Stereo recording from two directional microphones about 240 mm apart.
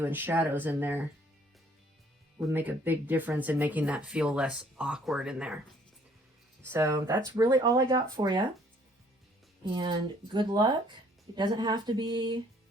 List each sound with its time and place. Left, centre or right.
0.0 s speech: centre
2.5 s speech: centre
6.7 s speech: centre
9.7 s speech: centre